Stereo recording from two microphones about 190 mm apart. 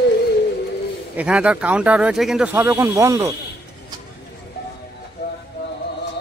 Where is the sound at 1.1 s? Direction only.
5° right (ahead or behind).